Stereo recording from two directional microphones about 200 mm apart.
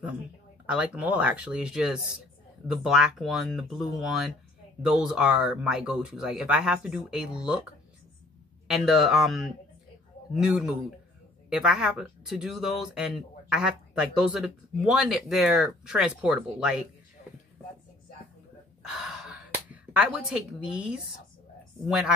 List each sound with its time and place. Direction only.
0.7 s speech: 5° right (ahead or behind)
8.6 s speech: centre (ahead or behind)
18.8 s gasp: 5° right (ahead or behind)
21.8 s speech: 5° right (ahead or behind)